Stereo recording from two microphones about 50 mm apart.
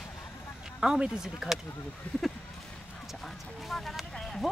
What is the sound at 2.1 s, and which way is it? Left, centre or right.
Speech, left.